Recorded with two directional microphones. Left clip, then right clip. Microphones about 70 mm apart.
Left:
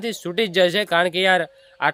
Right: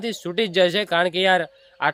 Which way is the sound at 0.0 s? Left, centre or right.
Left.